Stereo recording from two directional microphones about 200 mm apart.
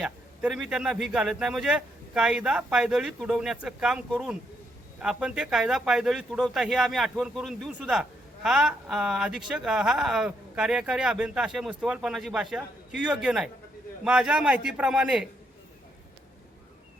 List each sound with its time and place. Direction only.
0.0 s speech: 5° right (ahead or behind)